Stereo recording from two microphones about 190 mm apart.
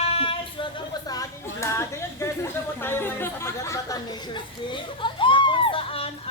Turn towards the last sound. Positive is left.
turn(degrees=30)  # may be behind; listen again after turning